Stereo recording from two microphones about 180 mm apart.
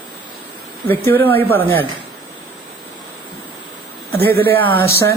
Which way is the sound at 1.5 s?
10° left (ahead or behind).